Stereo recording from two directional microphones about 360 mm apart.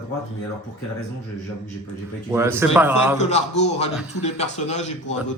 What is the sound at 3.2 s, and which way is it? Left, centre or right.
A man's voice, centre.